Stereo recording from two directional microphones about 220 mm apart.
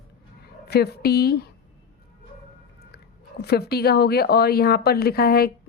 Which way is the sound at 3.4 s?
45° left (ahead or behind).